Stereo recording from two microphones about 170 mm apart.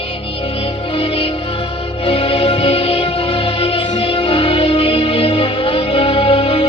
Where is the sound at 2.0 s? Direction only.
35° left (ahead or behind).